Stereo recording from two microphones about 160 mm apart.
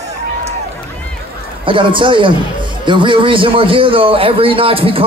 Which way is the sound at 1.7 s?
30° right (ahead or behind).